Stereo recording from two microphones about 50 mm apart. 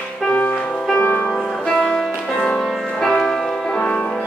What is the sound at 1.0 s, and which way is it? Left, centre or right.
Music, left.